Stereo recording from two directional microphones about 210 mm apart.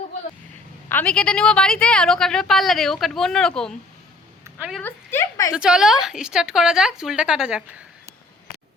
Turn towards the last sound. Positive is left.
turn(degrees=-5)  # may be behind; listen again after turning